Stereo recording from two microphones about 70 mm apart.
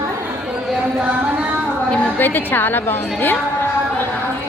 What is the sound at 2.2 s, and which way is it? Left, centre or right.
A woman's voice, left.